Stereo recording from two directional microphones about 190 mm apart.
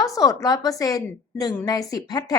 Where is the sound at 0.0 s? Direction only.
15° left (ahead or behind).